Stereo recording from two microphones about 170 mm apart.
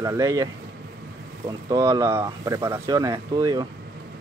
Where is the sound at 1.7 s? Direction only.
20° right (ahead or behind).